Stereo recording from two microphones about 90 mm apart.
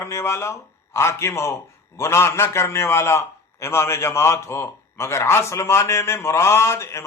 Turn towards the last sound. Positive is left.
turn(degrees=30)  # may be behind; listen again after turning